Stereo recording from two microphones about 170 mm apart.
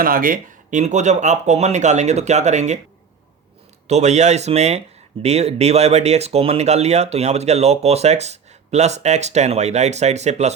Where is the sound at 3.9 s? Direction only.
40° right (ahead or behind).